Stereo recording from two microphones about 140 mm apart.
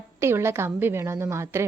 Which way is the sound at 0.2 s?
20° right (ahead or behind).